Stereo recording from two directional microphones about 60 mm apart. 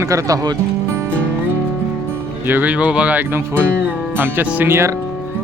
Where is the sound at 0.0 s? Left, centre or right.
Right.